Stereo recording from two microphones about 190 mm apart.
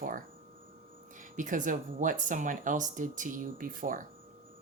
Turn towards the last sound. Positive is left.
turn(degrees=-45)  # may be behind; listen again after turning